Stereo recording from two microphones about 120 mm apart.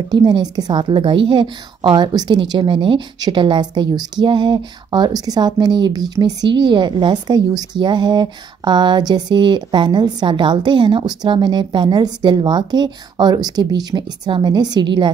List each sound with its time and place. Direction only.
0.1 s a woman's voice: 35° right (ahead or behind)